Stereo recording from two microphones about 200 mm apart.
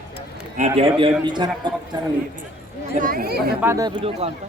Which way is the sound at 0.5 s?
30° right (ahead or behind).